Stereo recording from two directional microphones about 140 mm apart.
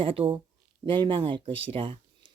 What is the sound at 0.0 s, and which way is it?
Speech, 40° right (ahead or behind).